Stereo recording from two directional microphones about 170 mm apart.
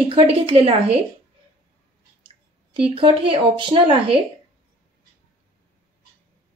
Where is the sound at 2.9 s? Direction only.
30° right (ahead or behind).